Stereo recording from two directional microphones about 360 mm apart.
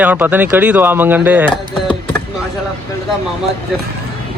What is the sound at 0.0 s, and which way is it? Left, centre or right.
Speech, centre.